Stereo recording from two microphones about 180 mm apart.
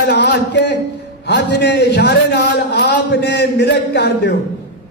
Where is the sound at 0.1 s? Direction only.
75° left (ahead or behind).